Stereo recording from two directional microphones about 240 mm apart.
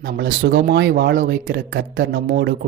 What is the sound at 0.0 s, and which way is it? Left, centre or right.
Speech, right.